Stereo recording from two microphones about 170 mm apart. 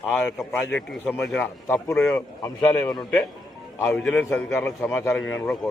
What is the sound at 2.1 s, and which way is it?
Speech, 15° left (ahead or behind).